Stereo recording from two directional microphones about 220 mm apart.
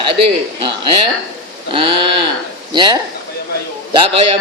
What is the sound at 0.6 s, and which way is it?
A man's voice, 20° right (ahead or behind).